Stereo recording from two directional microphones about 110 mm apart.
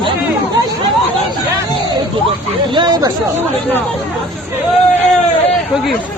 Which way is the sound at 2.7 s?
40° right (ahead or behind).